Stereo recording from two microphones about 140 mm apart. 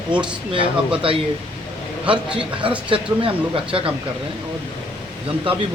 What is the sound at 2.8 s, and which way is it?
Speech, 40° right (ahead or behind).